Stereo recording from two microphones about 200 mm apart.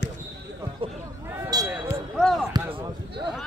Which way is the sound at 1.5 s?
20° right (ahead or behind).